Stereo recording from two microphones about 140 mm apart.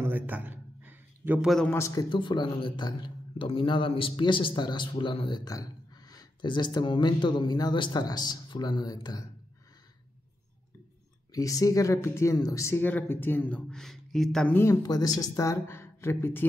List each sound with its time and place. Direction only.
0.0 s a sound: 15° right (ahead or behind)
1.7 s speech: 20° left (ahead or behind)
2.0 s a man's voice: 35° left (ahead or behind)
11.3 s speech: 25° left (ahead or behind); by 14.5 s 5° left (ahead or behind)
14.5 s speech: 20° left (ahead or behind)